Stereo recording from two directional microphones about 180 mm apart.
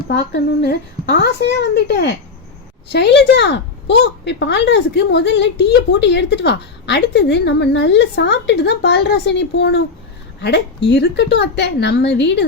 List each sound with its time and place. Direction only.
0.6 s a woman's voice: 65° left (ahead or behind)